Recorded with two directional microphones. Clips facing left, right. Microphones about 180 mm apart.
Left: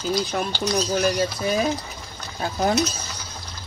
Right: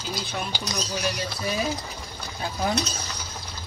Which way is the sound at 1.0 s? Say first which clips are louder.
Left 7 dB; 50° left (ahead or behind).